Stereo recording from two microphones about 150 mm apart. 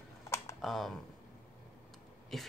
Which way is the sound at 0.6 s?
Centre (ahead or behind).